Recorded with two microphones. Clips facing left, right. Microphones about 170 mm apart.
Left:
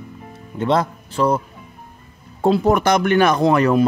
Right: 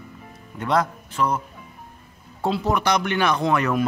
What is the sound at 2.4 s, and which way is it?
Speech, 50° left (ahead or behind).